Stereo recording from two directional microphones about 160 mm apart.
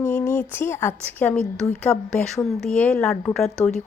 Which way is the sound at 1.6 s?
15° left (ahead or behind).